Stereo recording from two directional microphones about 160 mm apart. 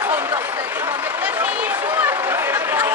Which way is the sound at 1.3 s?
10° right (ahead or behind).